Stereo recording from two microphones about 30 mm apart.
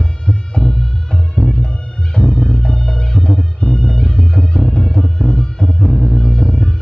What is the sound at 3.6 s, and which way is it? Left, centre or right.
Bagpipes, left.